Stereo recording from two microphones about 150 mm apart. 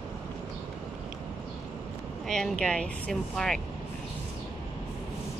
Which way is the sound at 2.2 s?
5° left (ahead or behind).